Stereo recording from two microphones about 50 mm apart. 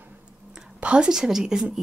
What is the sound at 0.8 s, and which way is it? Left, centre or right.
Speech, centre.